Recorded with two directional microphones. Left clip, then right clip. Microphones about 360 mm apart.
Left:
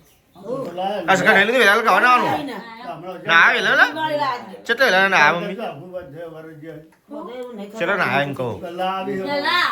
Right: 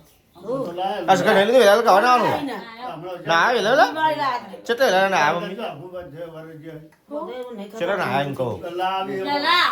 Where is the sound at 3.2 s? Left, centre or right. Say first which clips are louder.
Left 4 dB; centre.